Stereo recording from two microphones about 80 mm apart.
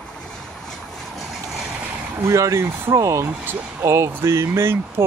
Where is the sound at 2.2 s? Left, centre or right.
Right.